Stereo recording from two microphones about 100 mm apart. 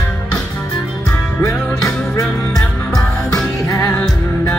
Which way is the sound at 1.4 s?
30° left (ahead or behind).